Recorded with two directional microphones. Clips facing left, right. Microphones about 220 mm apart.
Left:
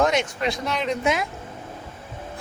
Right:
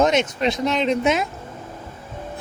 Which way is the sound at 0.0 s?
20° right (ahead or behind).